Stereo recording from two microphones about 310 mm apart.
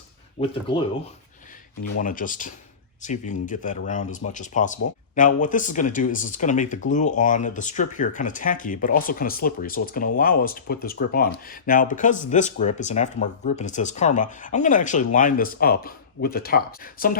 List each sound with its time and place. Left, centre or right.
2.0 s speech: left